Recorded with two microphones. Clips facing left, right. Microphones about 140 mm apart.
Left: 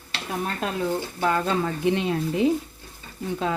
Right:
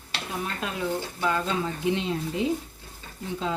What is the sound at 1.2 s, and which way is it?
Speech, 55° left (ahead or behind).